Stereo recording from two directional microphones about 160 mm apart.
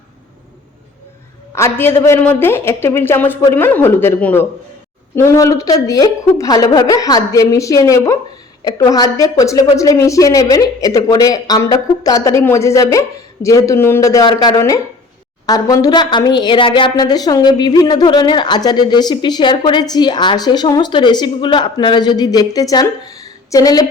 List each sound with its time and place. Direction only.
1.5 s a man's voice: 15° left (ahead or behind)